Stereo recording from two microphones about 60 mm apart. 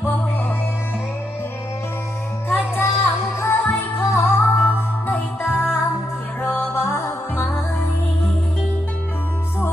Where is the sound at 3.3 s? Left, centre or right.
Left.